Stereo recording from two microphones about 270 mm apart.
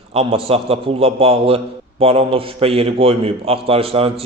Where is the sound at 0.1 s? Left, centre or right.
Right.